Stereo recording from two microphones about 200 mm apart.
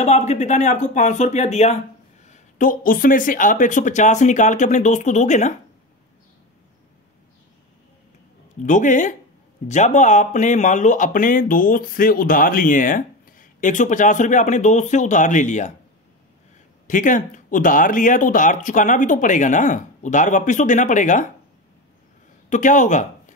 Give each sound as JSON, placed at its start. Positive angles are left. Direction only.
{"t": 0.0, "sound": "speech", "side_deg": 35}
{"t": 8.6, "sound": "speech", "side_deg": 40}
{"t": 16.8, "sound": "speech", "side_deg": 40}
{"t": 22.5, "sound": "speech", "side_deg": 40}